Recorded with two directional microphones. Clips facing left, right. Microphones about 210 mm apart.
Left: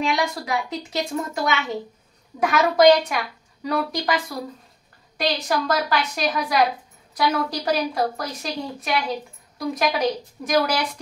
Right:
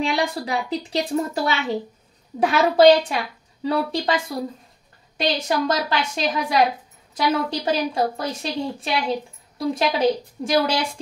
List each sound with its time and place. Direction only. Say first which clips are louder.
0.0 s a woman's voice: right 1 dB; 30° right (ahead or behind)